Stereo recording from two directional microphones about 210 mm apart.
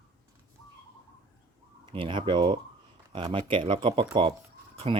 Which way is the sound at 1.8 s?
25° right (ahead or behind).